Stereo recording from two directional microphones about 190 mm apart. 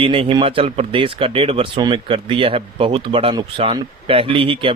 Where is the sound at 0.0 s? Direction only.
30° right (ahead or behind).